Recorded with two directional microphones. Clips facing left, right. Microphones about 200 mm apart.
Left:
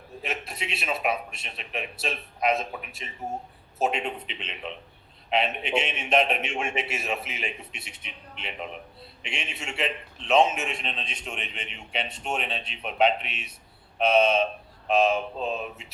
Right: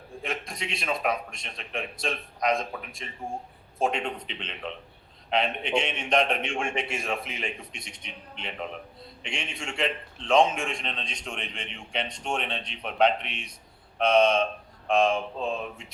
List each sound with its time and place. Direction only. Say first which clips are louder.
0.2 s a man's voice: even; 5° left (ahead or behind)